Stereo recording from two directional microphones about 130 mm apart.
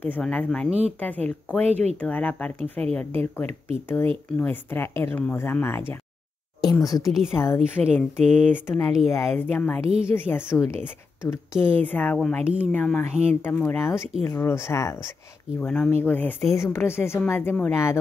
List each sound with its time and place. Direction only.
0.0 s a woman's voice: 10° left (ahead or behind)
0.7 s speech: 55° right (ahead or behind)
0.9 s a woman's voice: 10° left (ahead or behind)
1.7 s speech: 55° right (ahead or behind)
2.0 s a woman's voice: 10° left (ahead or behind)
3.4 s speech: 50° right (ahead or behind)
4.4 s a woman's voice: 15° left (ahead or behind)
7.1 s speech: 5° right (ahead or behind)
7.3 s speech: 20° left (ahead or behind)
7.8 s speech: 60° right (ahead or behind)
8.5 s a woman's voice: 20° left (ahead or behind)
15.6 s a woman's voice: 10° left (ahead or behind)